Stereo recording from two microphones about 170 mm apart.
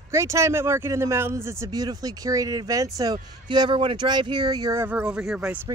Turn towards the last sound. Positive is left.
turn(degrees=-5)  # may be behind; listen again after turning